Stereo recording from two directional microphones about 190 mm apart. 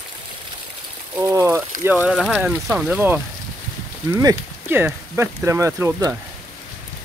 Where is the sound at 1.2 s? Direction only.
15° right (ahead or behind).